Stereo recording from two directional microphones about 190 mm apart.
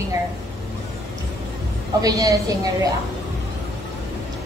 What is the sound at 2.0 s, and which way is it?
Speech, 15° right (ahead or behind).